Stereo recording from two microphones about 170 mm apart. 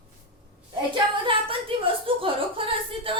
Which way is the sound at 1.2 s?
30° right (ahead or behind).